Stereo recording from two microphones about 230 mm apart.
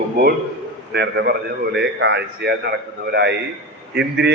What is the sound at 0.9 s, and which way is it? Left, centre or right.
A man's voice, right.